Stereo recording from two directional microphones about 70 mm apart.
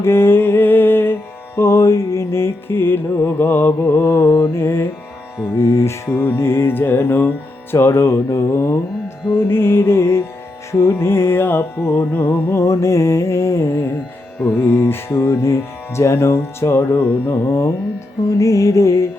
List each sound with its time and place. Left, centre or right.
0.0 s music: left
1.5 s music: left